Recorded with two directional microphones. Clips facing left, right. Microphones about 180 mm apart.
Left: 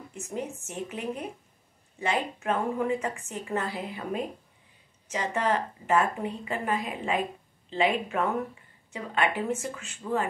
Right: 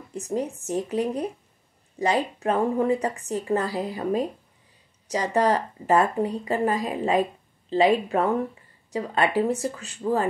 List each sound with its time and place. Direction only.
0.1 s speech: 35° right (ahead or behind)